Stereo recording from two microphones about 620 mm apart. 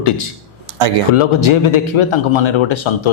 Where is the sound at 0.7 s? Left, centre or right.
Right.